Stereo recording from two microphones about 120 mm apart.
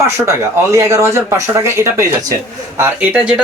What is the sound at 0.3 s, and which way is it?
Speech, 25° right (ahead or behind).